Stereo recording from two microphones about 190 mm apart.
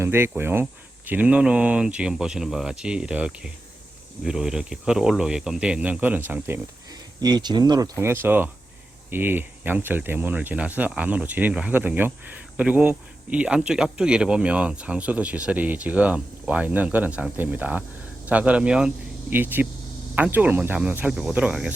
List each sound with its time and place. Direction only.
0.0 s speech: 15° right (ahead or behind)